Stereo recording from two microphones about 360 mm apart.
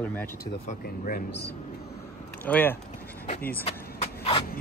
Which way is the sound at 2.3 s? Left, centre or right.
Centre.